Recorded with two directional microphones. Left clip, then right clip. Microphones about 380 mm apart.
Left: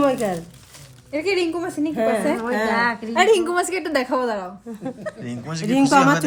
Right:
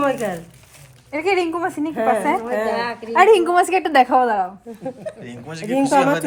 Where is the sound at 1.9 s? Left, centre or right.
Centre.